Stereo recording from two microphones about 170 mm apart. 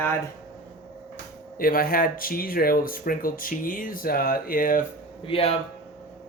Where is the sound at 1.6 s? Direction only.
60° left (ahead or behind).